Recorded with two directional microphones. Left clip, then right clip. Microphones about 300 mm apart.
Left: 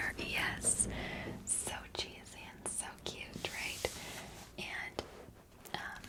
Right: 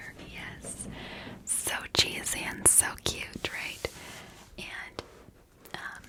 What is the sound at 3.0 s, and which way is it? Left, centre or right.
Whispering, right.